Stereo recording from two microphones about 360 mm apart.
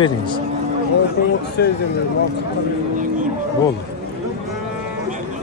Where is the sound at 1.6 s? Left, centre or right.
Left.